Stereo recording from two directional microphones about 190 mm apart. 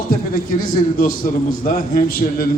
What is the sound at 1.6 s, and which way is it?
Speech, 45° left (ahead or behind).